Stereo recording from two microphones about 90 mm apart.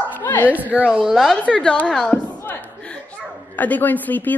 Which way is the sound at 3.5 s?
20° left (ahead or behind).